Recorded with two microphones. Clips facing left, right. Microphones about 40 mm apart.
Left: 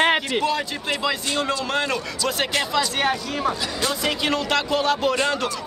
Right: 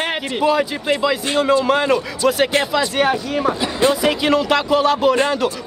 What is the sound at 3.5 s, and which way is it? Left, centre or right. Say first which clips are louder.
Speech: right 9 dB; right.